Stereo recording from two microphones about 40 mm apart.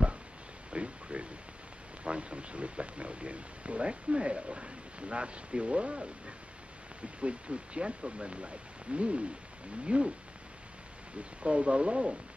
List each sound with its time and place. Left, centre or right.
0.7 s a sound: right
2.0 s speech: right
11.4 s speech: right